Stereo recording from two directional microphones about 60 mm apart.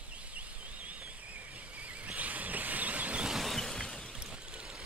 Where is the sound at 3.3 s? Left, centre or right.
Centre.